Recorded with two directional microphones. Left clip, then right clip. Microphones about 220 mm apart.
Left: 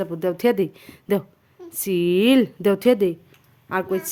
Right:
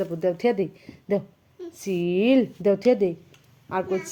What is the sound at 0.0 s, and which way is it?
Speech, 30° left (ahead or behind).